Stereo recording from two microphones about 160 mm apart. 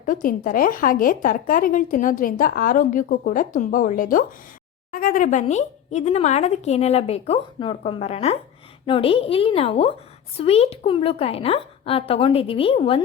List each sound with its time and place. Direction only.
0.0 s speech: 55° left (ahead or behind); by 13.0 s 35° left (ahead or behind)